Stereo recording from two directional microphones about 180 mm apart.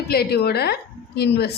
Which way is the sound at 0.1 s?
60° left (ahead or behind).